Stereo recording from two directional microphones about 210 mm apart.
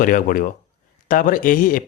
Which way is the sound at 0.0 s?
40° left (ahead or behind).